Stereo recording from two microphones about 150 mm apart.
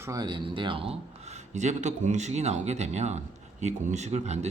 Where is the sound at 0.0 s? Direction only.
25° right (ahead or behind).